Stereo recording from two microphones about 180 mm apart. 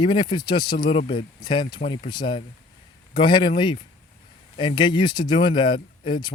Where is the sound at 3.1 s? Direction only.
25° left (ahead or behind).